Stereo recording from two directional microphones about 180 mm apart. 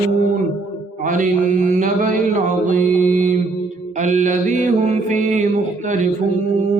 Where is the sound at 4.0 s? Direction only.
45° right (ahead or behind).